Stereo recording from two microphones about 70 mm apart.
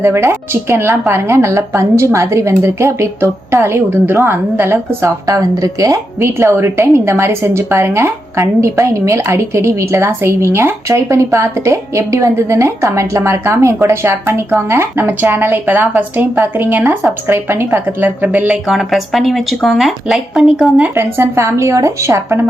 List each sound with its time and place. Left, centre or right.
0.0 s speech: right
5.2 s a woman's voice: right
6.2 s a woman's voice: right
15.0 s speech: right
18.4 s speech: centre
20.9 s a woman's voice: right